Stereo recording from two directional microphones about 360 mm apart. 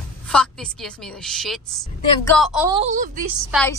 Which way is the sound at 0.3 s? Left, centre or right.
Centre.